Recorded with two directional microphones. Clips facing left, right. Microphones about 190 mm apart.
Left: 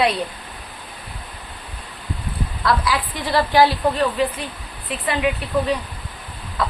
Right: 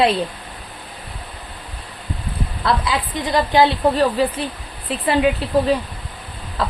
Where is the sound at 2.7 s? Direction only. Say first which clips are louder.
Even; 25° right (ahead or behind).